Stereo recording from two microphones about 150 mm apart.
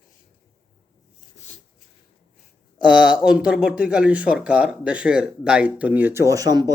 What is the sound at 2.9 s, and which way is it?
Speech, 5° right (ahead or behind).